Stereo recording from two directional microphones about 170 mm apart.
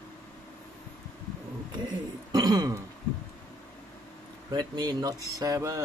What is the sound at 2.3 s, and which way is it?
Throat clearing, 25° right (ahead or behind).